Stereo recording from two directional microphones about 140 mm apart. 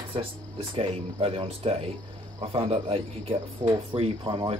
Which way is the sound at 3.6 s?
30° right (ahead or behind).